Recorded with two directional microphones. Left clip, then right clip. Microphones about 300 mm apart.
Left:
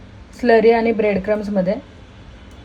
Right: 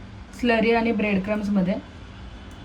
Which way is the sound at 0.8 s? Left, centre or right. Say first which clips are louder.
Left 7 dB; right.